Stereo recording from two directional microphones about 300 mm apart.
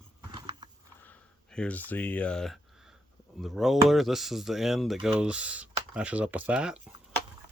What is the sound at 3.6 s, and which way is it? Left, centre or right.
Speech, centre.